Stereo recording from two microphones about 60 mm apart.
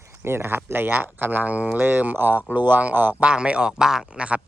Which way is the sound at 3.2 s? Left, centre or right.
Centre.